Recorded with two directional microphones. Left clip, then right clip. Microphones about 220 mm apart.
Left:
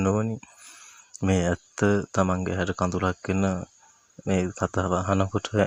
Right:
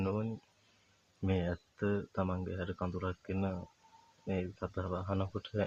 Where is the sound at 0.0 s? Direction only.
30° left (ahead or behind).